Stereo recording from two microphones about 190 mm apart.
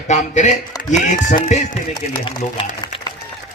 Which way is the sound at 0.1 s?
40° left (ahead or behind).